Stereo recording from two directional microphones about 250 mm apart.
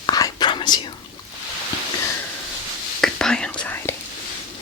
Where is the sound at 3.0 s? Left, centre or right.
Centre.